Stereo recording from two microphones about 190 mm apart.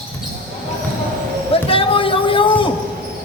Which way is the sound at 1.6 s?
30° left (ahead or behind).